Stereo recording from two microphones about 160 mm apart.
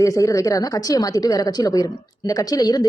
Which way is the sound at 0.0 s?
20° left (ahead or behind).